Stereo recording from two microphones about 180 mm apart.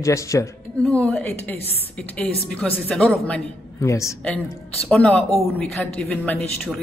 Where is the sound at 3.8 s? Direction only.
15° left (ahead or behind).